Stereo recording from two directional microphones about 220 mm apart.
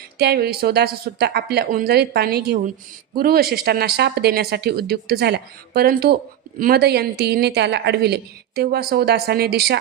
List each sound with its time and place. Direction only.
0.2 s a woman's voice: 45° right (ahead or behind)